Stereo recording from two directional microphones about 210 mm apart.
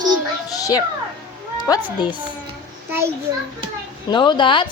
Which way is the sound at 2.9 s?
10° right (ahead or behind).